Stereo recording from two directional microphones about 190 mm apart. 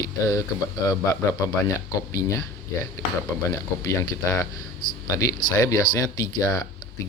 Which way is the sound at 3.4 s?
15° left (ahead or behind).